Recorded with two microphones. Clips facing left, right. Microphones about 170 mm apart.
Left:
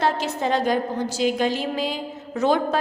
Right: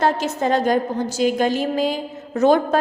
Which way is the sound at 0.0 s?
45° right (ahead or behind).